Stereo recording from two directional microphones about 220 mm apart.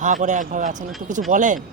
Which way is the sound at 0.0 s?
35° right (ahead or behind).